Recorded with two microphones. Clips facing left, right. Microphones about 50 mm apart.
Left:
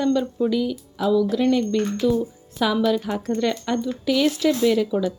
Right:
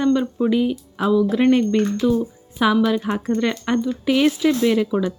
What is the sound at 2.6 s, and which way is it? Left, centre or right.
Speech, right.